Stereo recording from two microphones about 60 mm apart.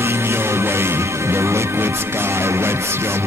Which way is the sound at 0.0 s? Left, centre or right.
Right.